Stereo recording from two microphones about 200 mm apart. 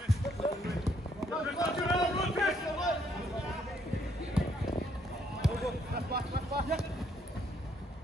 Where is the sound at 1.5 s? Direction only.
15° left (ahead or behind).